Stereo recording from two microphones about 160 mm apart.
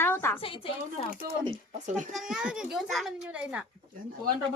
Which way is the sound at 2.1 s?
5° right (ahead or behind).